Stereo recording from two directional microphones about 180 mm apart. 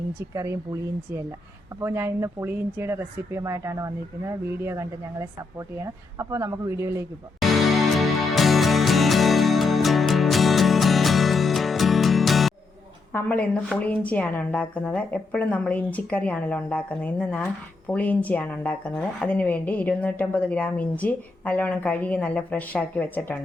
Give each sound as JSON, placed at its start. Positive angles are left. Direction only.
{"t": 0.3, "sound": "speech", "side_deg": -15}
{"t": 7.4, "sound": "music", "side_deg": 0}
{"t": 13.1, "sound": "speech", "side_deg": 10}